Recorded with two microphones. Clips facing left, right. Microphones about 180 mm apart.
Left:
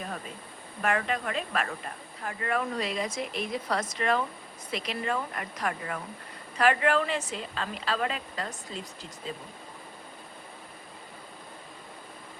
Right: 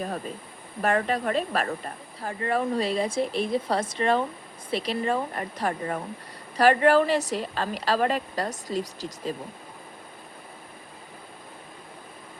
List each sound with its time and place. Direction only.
0.8 s speech: 35° right (ahead or behind)